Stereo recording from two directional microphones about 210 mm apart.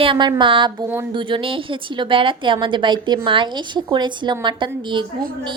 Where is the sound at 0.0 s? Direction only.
20° right (ahead or behind).